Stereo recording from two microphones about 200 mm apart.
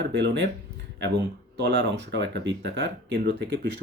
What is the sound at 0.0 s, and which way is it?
Speech, 60° right (ahead or behind).